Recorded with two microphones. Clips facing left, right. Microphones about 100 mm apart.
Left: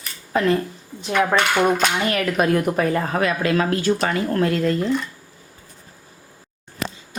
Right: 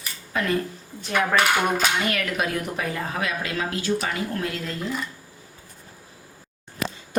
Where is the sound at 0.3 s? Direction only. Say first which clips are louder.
Left 7 dB; 35° left (ahead or behind).